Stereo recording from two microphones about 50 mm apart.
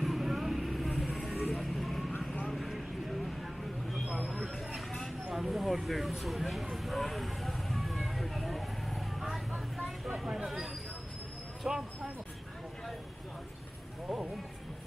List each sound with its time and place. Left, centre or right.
0.0 s vehicle: centre
0.9 s vehicle: centre
1.4 s vehicle: centre
2.1 s vehicle: left
2.5 s a sound: centre
4.4 s vehicle: centre
11.6 s a sound: centre